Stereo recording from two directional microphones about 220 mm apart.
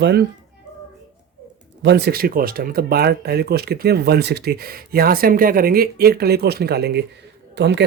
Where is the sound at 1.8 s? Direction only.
50° right (ahead or behind).